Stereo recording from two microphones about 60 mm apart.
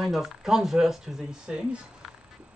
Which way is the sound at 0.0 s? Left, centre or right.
Centre.